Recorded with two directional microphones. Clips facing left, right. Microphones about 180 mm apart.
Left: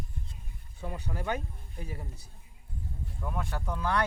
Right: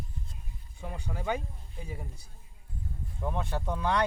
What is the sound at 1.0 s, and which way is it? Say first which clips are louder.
Speech: right 2 dB; 10° right (ahead or behind).